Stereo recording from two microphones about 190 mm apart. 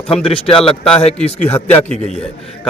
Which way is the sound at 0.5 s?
30° left (ahead or behind).